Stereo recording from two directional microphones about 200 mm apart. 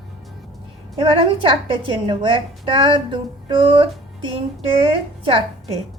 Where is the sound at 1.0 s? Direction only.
25° right (ahead or behind).